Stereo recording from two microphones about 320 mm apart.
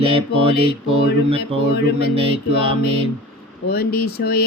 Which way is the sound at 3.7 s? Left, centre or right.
Left.